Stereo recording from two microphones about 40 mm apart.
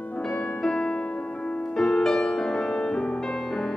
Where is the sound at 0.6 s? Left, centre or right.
Centre.